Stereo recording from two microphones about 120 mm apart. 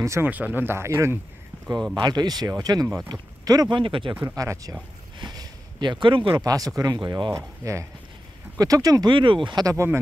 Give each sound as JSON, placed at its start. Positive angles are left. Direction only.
{"t": 0.0, "sound": "speech", "side_deg": -25}
{"t": 0.3, "sound": "speech", "side_deg": -15}
{"t": 2.0, "sound": "speech", "side_deg": -35}
{"t": 4.2, "sound": "speech", "side_deg": -30}
{"t": 6.4, "sound": "speech", "side_deg": -30}
{"t": 9.1, "sound": "speech", "side_deg": -45}